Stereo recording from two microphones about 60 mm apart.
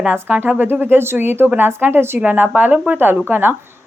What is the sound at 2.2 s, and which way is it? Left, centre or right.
A woman's voice, right.